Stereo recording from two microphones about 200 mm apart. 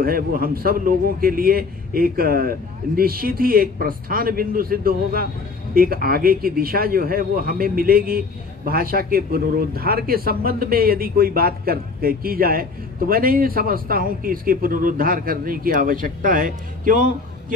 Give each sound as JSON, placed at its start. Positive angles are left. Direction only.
{"t": 0.0, "sound": "a man's voice", "side_deg": -45}